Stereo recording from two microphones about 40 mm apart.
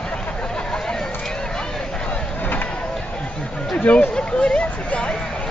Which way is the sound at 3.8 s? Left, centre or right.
Left.